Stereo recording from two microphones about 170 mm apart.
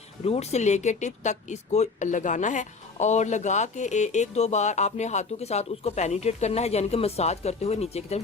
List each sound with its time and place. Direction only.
0.3 s speech: 40° left (ahead or behind)